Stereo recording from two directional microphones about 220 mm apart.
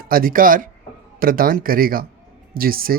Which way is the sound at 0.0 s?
40° right (ahead or behind).